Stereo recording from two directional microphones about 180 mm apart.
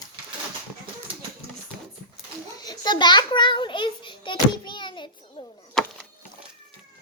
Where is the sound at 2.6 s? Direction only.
20° left (ahead or behind).